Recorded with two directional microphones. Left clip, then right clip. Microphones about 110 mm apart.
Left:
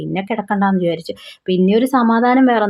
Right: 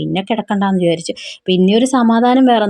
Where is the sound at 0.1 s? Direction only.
50° right (ahead or behind).